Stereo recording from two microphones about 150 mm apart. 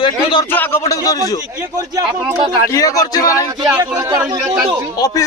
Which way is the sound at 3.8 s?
25° right (ahead or behind).